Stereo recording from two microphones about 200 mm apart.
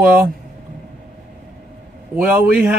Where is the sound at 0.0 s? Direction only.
10° right (ahead or behind).